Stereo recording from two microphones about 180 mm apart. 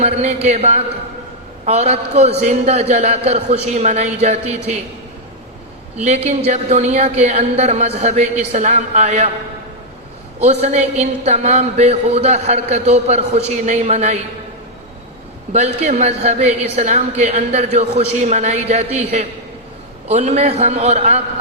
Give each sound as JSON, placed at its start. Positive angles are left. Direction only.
{"t": 0.0, "sound": "speech", "side_deg": -35}
{"t": 6.0, "sound": "speech", "side_deg": -35}
{"t": 10.4, "sound": "speech", "side_deg": -35}
{"t": 15.5, "sound": "speech", "side_deg": -40}